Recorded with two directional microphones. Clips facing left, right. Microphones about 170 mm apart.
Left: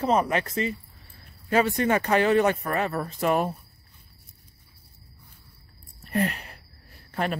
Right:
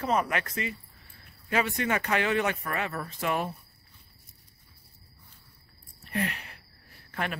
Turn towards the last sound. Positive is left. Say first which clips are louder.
# left 5 dB
turn(degrees=35)  # may be behind; listen again after turning